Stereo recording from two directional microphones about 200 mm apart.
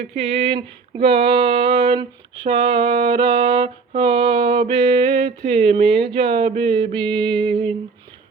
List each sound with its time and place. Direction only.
0.2 s female singing: 30° right (ahead or behind)